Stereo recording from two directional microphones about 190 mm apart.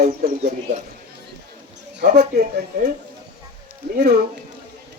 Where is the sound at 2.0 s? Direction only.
50° right (ahead or behind).